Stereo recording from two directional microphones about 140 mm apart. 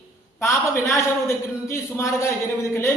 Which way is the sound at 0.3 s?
20° left (ahead or behind).